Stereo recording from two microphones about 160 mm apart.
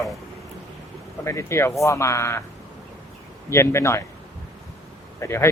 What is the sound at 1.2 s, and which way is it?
Speech, 15° left (ahead or behind).